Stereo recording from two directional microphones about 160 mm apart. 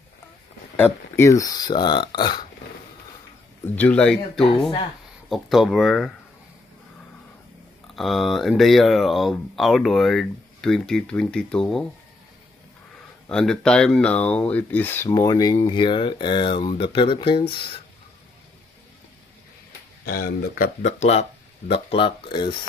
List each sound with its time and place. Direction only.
0.7 s speech: 15° left (ahead or behind); by 2.4 s 30° left (ahead or behind)
3.7 s speech: 10° left (ahead or behind)
4.4 s speech: 35° left (ahead or behind)
5.3 s speech: centre (ahead or behind)
7.9 s speech: centre (ahead or behind)
13.3 s speech: 5° left (ahead or behind); by 17.8 s 30° left (ahead or behind)
20.1 s speech: 65° left (ahead or behind); by 21.3 s 45° left (ahead or behind)
21.7 s speech: 35° left (ahead or behind)